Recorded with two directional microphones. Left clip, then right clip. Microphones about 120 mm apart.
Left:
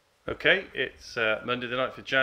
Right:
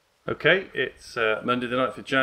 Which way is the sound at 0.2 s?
45° left (ahead or behind).